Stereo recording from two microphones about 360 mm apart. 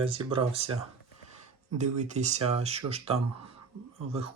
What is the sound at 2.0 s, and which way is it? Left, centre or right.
Speech, centre.